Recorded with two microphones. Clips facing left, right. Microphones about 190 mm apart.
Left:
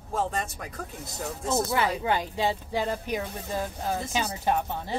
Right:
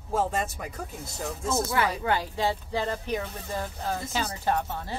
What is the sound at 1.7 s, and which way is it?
Speech, 20° left (ahead or behind).